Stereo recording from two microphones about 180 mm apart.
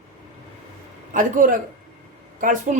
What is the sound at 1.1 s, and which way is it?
A man's voice, 45° right (ahead or behind).